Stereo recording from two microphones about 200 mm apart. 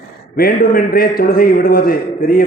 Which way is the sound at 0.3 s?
50° left (ahead or behind).